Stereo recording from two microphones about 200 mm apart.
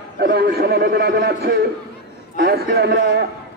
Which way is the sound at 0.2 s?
50° right (ahead or behind).